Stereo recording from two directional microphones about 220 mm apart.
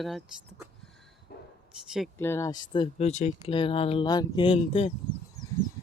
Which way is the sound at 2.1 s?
10° left (ahead or behind).